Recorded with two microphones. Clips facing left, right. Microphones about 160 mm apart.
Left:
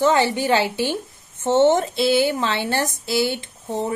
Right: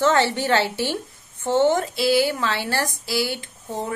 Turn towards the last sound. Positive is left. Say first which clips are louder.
# left 4 dB
turn(degrees=20)  # may be behind; listen again after turning